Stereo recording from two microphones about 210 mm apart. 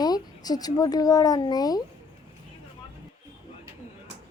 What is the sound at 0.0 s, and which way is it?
Speech, 20° left (ahead or behind).